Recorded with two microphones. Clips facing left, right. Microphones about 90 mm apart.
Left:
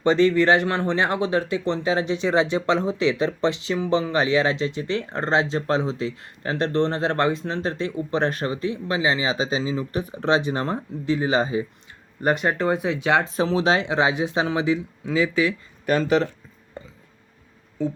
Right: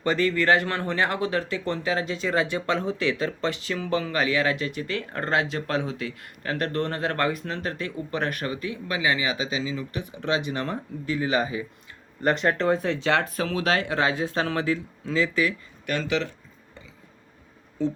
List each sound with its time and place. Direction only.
0.0 s speech: 20° left (ahead or behind)
12.2 s speech: 10° left (ahead or behind)
13.3 s speech: 25° left (ahead or behind)
15.9 s speech: 40° left (ahead or behind)
16.8 s a sound: 45° left (ahead or behind)